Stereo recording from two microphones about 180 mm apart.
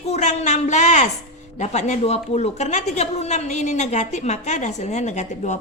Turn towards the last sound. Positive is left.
turn(degrees=40)  # may be behind; listen again after turning